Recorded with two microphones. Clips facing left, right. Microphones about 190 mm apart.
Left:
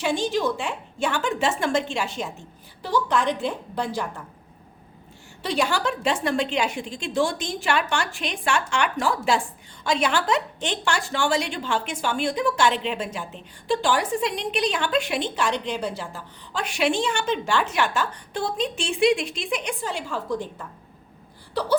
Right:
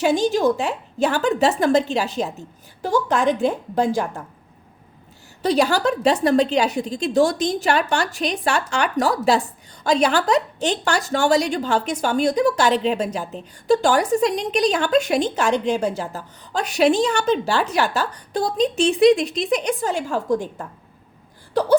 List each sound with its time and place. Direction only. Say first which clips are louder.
0.0 s a woman's voice: right 6 dB; 40° right (ahead or behind)
5.4 s a woman's voice: right 6 dB; 40° right (ahead or behind)